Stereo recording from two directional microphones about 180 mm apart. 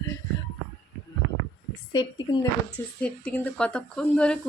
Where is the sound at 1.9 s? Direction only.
25° left (ahead or behind).